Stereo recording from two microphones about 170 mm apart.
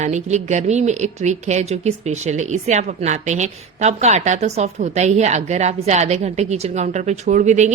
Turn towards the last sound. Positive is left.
turn(degrees=-45)  # may be behind; listen again after turning